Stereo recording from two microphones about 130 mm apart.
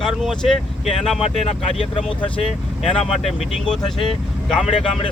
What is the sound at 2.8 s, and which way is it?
Speech, centre (ahead or behind).